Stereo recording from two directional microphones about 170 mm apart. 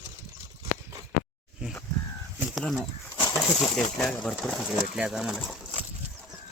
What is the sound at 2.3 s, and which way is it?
Bird, centre (ahead or behind).